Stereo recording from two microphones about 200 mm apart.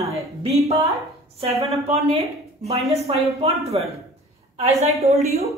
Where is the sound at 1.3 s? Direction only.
30° right (ahead or behind).